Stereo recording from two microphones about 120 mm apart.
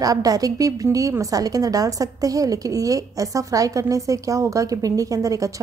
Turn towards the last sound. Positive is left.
turn(degrees=-30)  # may be behind; listen again after turning